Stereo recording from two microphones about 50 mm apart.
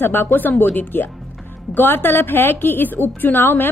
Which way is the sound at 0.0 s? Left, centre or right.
Left.